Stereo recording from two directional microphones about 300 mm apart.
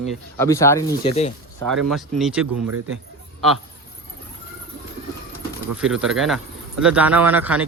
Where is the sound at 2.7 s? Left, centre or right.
Right.